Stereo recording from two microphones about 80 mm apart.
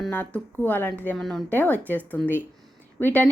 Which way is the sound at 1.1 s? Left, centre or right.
Centre.